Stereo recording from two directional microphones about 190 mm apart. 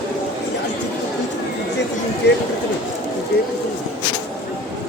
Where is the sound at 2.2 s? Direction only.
60° left (ahead or behind).